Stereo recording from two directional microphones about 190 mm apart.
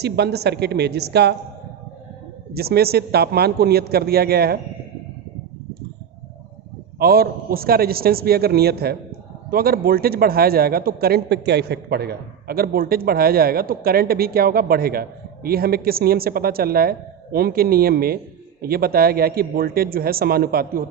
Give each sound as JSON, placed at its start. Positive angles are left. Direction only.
{"t": 0.0, "sound": "speech", "side_deg": -60}
{"t": 2.5, "sound": "speech", "side_deg": -55}
{"t": 7.0, "sound": "a man's voice", "side_deg": -55}